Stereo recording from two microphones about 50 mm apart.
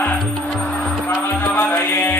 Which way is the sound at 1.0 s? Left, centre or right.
Left.